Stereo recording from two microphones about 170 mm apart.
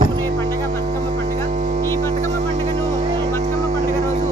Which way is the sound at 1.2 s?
45° right (ahead or behind).